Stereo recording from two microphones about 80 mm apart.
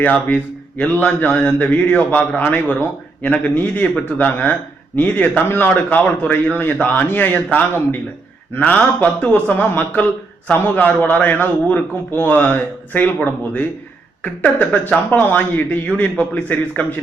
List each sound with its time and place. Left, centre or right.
0.0 s a man's voice: centre